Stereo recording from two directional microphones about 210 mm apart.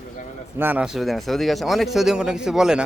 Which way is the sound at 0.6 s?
5° right (ahead or behind).